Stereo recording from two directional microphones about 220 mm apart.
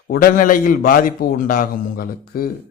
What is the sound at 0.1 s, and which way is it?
A man's voice, 40° left (ahead or behind).